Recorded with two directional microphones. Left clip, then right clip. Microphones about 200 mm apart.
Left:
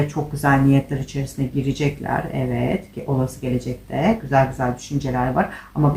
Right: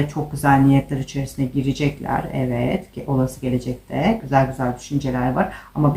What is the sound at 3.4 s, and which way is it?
Speech, centre (ahead or behind).